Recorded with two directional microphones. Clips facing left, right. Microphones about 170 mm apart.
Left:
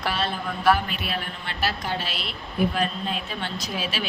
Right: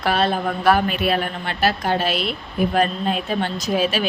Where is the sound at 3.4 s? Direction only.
45° right (ahead or behind).